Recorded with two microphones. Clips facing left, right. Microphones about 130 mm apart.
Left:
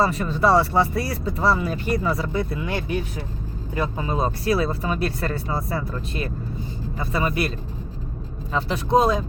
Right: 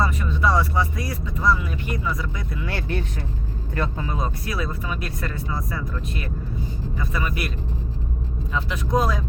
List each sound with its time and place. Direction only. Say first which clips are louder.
0.0 s speech: left 3 dB; 35° left (ahead or behind)
2.6 s speech: left 2 dB; 15° left (ahead or behind)
8.5 s speech: left 4 dB; 30° left (ahead or behind)